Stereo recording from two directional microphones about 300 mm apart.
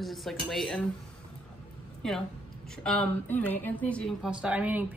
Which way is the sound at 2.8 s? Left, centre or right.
Centre.